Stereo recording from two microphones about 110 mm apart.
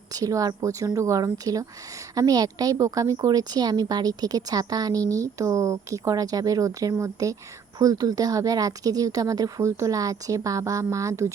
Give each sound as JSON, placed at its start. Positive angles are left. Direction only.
{"t": 0.1, "sound": "a woman's voice", "side_deg": -35}